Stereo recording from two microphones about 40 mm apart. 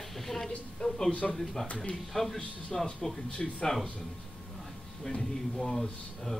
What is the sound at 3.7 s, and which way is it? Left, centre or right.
Speech, centre.